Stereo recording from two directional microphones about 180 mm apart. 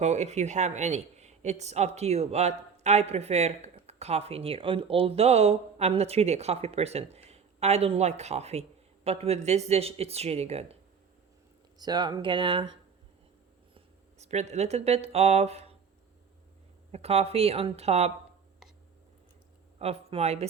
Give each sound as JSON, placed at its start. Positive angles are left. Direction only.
{"t": 0.0, "sound": "speech", "side_deg": -40}
{"t": 11.8, "sound": "speech", "side_deg": -20}
{"t": 14.2, "sound": "speech", "side_deg": -40}
{"t": 16.9, "sound": "speech", "side_deg": -35}
{"t": 19.8, "sound": "speech", "side_deg": -35}